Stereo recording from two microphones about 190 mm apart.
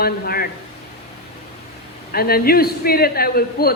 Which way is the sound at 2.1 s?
55° left (ahead or behind).